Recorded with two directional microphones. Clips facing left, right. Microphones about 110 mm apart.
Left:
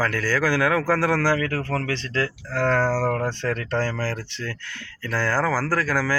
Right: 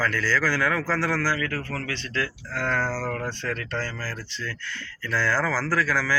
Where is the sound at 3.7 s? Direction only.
70° left (ahead or behind).